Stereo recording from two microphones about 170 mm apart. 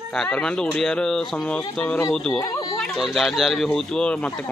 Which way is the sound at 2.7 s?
Centre (ahead or behind).